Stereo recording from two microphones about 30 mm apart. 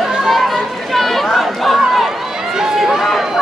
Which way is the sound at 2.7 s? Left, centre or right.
Centre.